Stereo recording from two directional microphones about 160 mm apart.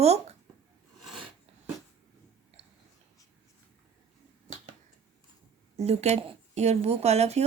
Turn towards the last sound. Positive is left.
turn(degrees=-45)  # may be behind; listen again after turning